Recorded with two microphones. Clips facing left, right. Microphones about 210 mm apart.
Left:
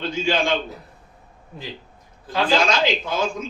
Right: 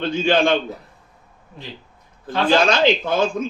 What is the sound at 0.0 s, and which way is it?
Speech, 55° right (ahead or behind).